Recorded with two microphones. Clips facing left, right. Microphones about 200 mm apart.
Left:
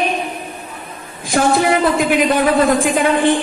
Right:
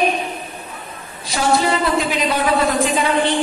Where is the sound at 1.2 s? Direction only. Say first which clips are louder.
Left 3 dB; 50° left (ahead or behind).